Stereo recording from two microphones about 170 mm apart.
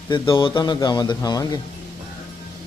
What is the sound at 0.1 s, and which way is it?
A man's voice, 30° left (ahead or behind).